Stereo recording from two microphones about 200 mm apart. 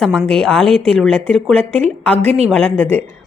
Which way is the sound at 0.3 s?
5° left (ahead or behind).